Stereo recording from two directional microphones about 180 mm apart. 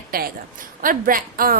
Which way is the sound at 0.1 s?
55° right (ahead or behind).